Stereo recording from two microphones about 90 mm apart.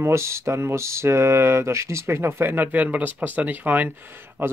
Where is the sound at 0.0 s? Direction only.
30° right (ahead or behind).